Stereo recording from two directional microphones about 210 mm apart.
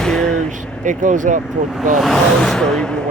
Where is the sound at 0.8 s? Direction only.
35° right (ahead or behind).